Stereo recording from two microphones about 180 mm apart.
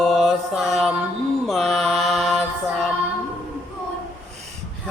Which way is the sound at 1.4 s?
Centre (ahead or behind).